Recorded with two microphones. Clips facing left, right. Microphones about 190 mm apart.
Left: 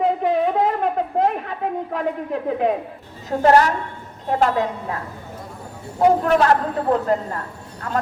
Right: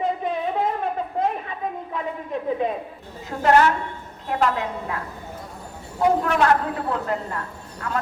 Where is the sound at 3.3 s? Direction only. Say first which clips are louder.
Left 2 dB; 40° left (ahead or behind).